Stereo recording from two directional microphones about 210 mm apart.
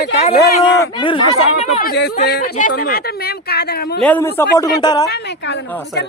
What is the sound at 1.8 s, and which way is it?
Speech, 45° left (ahead or behind).